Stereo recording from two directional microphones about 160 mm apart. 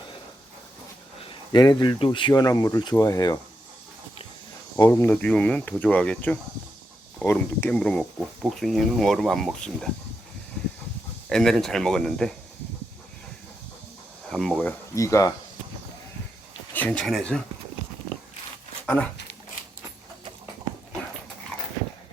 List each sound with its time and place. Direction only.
1.2 s speech: 30° left (ahead or behind)
4.9 s speech: 15° left (ahead or behind)
11.3 s speech: 5° left (ahead or behind)
14.3 s speech: centre (ahead or behind)
14.9 s speech: 20° left (ahead or behind)
16.7 s speech: 10° left (ahead or behind)
18.9 s speech: 10° left (ahead or behind)